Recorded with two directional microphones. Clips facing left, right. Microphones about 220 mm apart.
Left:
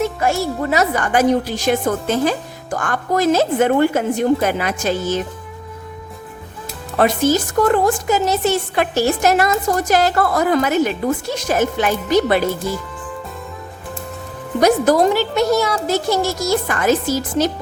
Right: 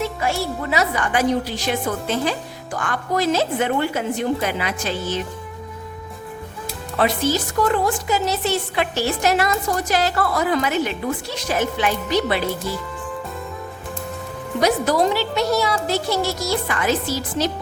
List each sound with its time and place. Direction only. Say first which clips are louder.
0.0 s a woman's voice: left 4 dB; 45° left (ahead or behind)
7.0 s a woman's voice: left 5 dB; 45° left (ahead or behind)
14.6 s a woman's voice: left 5 dB; 50° left (ahead or behind)